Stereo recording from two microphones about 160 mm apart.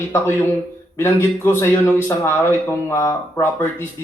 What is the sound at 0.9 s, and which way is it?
A man's voice, 15° left (ahead or behind).